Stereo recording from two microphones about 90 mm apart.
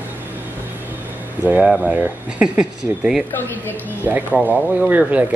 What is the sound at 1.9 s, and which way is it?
Speech, 15° right (ahead or behind).